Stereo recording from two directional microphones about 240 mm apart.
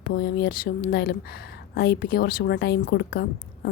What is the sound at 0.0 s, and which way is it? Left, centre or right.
A woman's voice, left.